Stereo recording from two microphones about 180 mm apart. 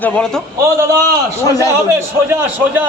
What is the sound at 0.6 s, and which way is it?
Speech, 15° right (ahead or behind).